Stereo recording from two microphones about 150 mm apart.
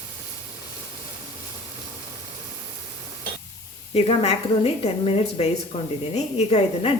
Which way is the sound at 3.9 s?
45° left (ahead or behind).